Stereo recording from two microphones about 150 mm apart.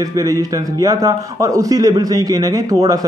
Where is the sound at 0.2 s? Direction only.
25° right (ahead or behind).